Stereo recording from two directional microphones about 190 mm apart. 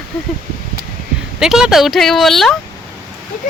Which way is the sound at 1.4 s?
Centre (ahead or behind).